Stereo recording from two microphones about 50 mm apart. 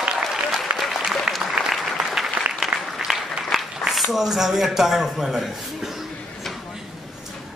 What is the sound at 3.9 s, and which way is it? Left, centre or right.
A man's voice, centre.